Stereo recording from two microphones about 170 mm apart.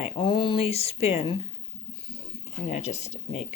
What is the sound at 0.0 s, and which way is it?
Speech, 30° left (ahead or behind).